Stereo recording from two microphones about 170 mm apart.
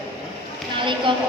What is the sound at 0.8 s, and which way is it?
Speech, 30° right (ahead or behind).